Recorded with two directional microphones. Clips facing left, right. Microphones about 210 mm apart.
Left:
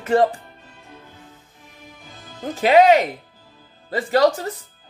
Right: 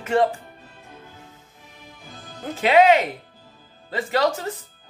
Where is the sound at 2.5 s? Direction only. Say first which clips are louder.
Left 2 dB; 35° left (ahead or behind).